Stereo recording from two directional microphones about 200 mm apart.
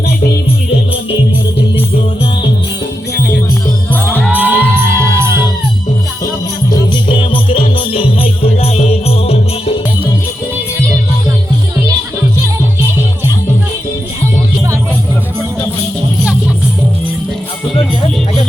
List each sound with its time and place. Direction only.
4.1 s music: 10° left (ahead or behind)
4.4 s music: 10° right (ahead or behind)
6.7 s music: 25° left (ahead or behind)